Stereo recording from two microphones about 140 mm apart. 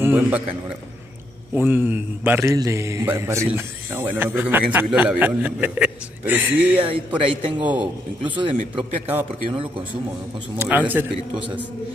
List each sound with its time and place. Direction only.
0.0 s a man's voice: 15° right (ahead or behind)
1.5 s a man's voice: 15° right (ahead or behind)
8.3 s a man's voice: 40° right (ahead or behind)
10.6 s a man's voice: 15° right (ahead or behind)